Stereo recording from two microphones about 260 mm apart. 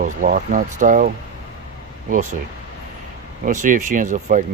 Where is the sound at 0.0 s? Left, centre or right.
Right.